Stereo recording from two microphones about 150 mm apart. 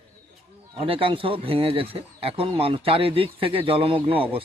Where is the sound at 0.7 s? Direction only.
35° right (ahead or behind).